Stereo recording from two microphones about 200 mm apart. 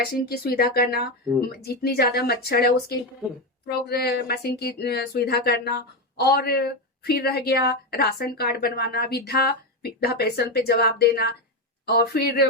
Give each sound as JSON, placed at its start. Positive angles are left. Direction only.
{"t": 0.0, "sound": "speech", "side_deg": 50}